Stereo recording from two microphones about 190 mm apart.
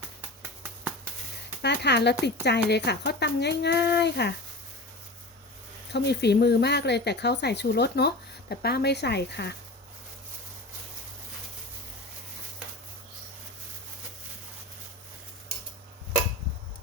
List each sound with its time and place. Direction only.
1.6 s speech: 60° left (ahead or behind)
5.9 s speech: 60° left (ahead or behind)